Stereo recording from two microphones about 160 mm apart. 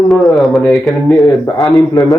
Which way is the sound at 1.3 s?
20° left (ahead or behind).